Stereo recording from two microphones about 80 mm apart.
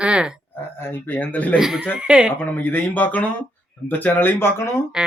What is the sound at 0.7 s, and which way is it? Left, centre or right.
Speech, left.